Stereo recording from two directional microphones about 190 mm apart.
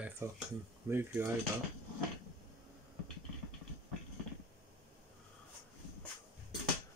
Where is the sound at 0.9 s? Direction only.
10° right (ahead or behind).